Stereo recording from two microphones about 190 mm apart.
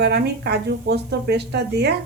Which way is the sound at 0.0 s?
60° right (ahead or behind).